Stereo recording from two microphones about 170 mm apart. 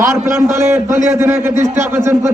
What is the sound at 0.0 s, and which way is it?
A man's voice, 15° right (ahead or behind).